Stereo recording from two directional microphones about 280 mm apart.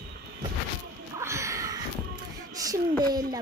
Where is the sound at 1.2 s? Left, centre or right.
Centre.